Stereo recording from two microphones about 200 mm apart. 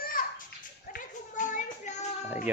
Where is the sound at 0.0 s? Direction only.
45° left (ahead or behind).